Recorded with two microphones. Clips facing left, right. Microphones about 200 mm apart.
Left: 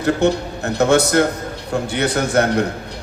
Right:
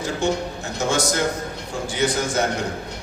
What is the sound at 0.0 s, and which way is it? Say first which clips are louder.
A man's voice: left 6 dB; 60° left (ahead or behind).